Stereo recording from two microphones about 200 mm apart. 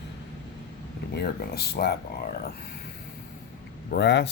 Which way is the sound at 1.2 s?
55° left (ahead or behind).